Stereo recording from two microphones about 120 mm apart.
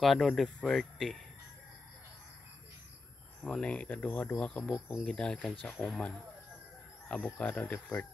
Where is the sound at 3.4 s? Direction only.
5° left (ahead or behind).